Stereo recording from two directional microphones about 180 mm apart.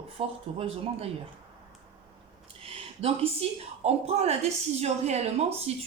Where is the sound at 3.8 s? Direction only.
35° right (ahead or behind).